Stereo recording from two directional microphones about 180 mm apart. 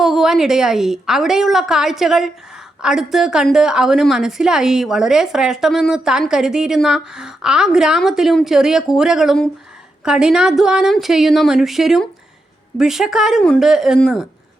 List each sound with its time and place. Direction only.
0.0 s a woman's voice: centre (ahead or behind)